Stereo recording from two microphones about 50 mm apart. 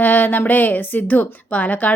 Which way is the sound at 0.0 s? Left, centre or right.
Left.